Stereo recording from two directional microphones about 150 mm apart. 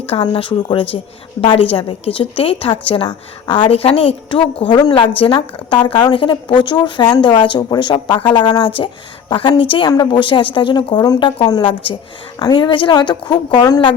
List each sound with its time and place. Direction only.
0.1 s a woman's voice: 35° left (ahead or behind)